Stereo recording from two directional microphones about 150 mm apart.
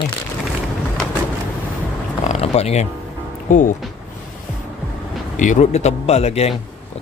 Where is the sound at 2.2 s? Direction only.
45° left (ahead or behind).